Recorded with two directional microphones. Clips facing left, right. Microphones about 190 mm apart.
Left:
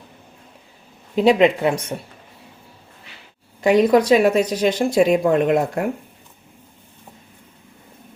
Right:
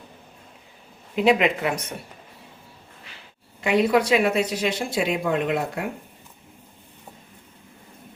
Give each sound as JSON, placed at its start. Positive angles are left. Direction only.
{"t": 1.1, "sound": "speech", "side_deg": 35}
{"t": 3.6, "sound": "speech", "side_deg": 40}